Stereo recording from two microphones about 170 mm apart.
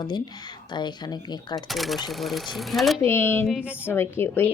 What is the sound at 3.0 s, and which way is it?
Speech, 15° left (ahead or behind).